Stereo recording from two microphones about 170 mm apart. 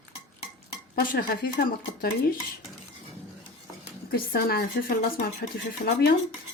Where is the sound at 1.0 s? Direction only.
65° left (ahead or behind).